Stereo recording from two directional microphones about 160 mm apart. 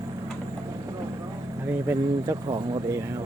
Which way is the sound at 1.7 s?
15° right (ahead or behind).